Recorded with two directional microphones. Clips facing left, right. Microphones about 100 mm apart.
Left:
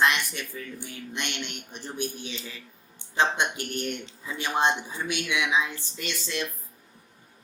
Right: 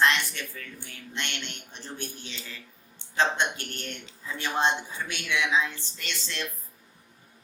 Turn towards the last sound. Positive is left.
turn(degrees=15)  # may be behind; listen again after turning